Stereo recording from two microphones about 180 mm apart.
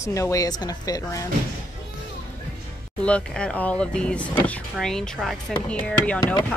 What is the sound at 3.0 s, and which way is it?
Speech, 5° left (ahead or behind).